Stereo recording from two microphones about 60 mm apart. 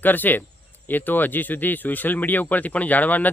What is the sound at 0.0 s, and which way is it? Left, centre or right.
Speech, left.